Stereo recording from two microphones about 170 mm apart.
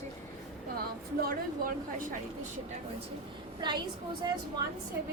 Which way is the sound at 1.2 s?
55° right (ahead or behind).